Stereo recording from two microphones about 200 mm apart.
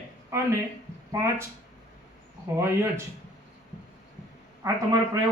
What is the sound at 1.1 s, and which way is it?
Speech, 15° right (ahead or behind).